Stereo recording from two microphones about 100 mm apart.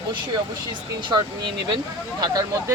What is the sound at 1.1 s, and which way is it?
Speech, 50° right (ahead or behind).